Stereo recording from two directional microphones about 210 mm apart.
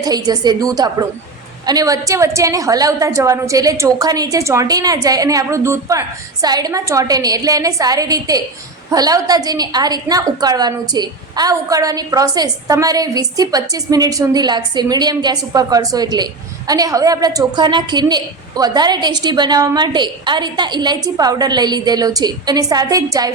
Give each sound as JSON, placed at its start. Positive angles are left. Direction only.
{"t": 0.0, "sound": "a woman's voice", "side_deg": -20}